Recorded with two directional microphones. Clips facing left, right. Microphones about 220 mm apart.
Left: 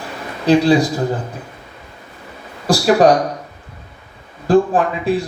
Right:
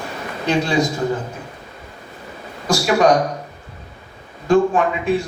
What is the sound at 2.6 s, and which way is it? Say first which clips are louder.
Speech: left 4 dB; 35° left (ahead or behind).